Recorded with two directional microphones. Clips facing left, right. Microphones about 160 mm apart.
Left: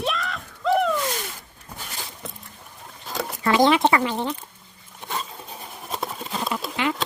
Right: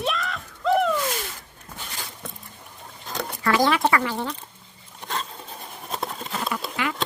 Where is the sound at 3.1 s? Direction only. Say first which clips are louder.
Left 2 dB; centre (ahead or behind).